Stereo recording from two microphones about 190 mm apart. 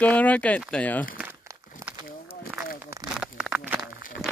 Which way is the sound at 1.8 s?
15° right (ahead or behind).